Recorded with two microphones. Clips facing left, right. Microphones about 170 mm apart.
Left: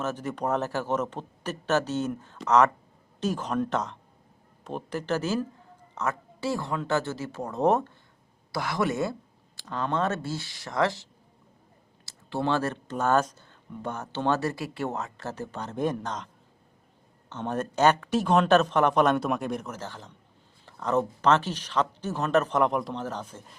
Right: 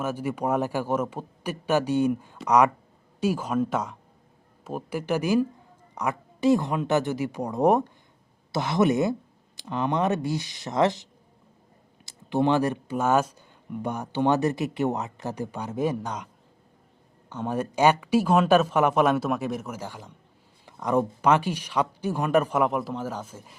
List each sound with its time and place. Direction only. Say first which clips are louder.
0.0 s speech: right 2 dB; 10° right (ahead or behind)